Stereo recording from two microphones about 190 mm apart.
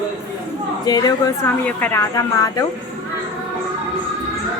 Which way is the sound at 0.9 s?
20° left (ahead or behind).